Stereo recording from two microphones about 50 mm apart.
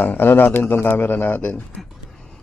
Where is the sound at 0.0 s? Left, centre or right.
Left.